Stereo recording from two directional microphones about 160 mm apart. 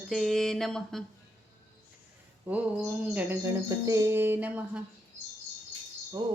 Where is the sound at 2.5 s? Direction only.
10° right (ahead or behind).